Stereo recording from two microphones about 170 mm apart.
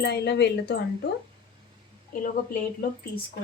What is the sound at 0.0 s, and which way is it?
Speech, 80° left.